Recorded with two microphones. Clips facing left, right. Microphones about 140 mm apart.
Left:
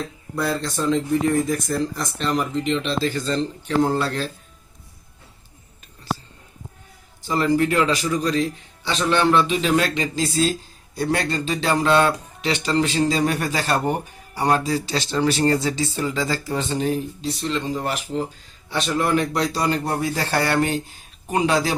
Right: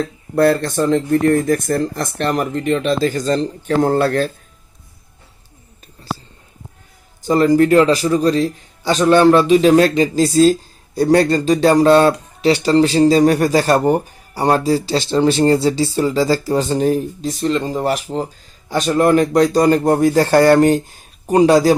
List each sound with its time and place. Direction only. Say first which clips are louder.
0.3 s speech: right 10 dB; 60° right (ahead or behind)
7.2 s a man's voice: right 7 dB; 45° right (ahead or behind)